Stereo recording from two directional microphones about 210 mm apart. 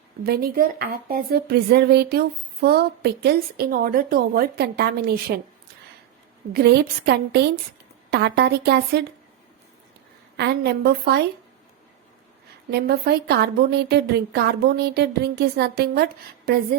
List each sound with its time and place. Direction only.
0.3 s speech: 45° right (ahead or behind)
6.5 s speech: 50° right (ahead or behind)
10.3 s speech: 50° right (ahead or behind)
12.7 s speech: 50° right (ahead or behind)